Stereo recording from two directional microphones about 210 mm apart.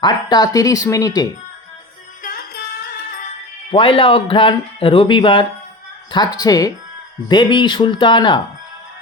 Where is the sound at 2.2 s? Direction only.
45° left (ahead or behind).